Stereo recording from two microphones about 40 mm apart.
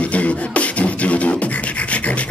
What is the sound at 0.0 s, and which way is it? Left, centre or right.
Beatboxing, left.